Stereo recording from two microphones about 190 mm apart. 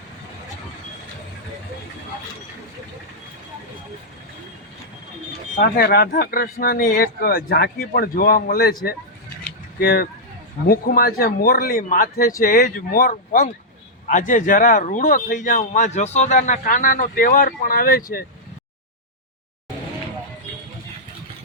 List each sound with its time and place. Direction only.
5.5 s speech: 50° left (ahead or behind)
9.4 s a sound: 55° left (ahead or behind)
10.7 s speech: 50° left (ahead or behind)